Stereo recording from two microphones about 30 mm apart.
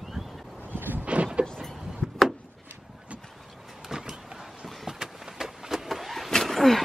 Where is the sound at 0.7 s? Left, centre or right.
Right.